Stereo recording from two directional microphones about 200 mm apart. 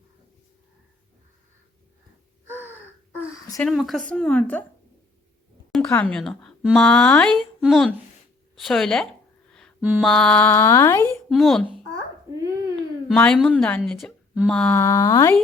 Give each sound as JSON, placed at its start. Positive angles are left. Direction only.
{"t": 2.5, "sound": "wail", "side_deg": -10}
{"t": 3.7, "sound": "a woman's voice", "side_deg": 0}
{"t": 5.9, "sound": "a woman's voice", "side_deg": 5}
{"t": 11.3, "sound": "a woman's voice", "side_deg": 0}
{"t": 12.4, "sound": "a sound", "side_deg": -15}
{"t": 13.1, "sound": "speech", "side_deg": 5}